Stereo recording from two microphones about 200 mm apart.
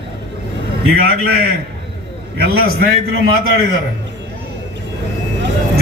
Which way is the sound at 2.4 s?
50° right (ahead or behind).